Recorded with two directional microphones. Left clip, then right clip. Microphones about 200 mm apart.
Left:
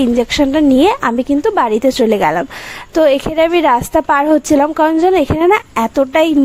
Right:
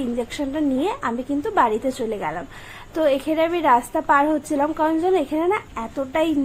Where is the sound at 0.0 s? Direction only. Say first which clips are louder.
Left 13 dB; 50° left (ahead or behind).